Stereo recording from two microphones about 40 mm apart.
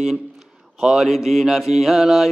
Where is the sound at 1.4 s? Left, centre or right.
Centre.